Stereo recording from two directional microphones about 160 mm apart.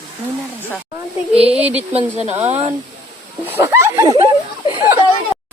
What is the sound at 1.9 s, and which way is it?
Speech, 40° right (ahead or behind).